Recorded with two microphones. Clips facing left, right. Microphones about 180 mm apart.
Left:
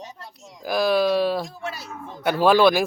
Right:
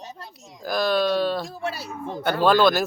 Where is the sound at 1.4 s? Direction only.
35° right (ahead or behind).